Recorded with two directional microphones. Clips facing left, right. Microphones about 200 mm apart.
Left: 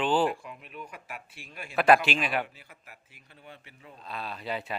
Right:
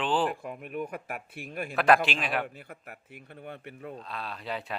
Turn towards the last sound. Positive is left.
turn(degrees=0)  # may be behind; listen again after turning